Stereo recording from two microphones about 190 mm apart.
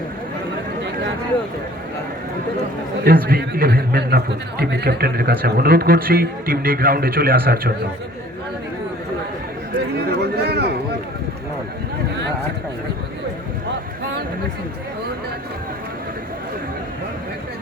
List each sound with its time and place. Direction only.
3.0 s a man's voice: 50° right (ahead or behind)
10.1 s a man's voice: 60° right (ahead or behind)